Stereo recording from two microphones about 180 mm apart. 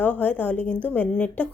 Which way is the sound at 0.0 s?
10° left (ahead or behind).